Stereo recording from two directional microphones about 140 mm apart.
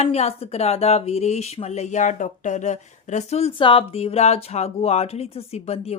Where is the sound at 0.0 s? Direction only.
50° left (ahead or behind).